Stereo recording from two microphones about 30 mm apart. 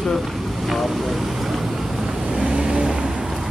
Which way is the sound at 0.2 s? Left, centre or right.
Centre.